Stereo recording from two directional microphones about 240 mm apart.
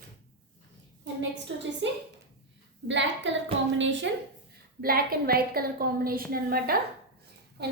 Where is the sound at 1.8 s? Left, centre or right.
Right.